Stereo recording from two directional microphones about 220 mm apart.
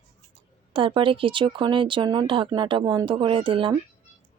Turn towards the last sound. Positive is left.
turn(degrees=-25)  # may be behind; listen again after turning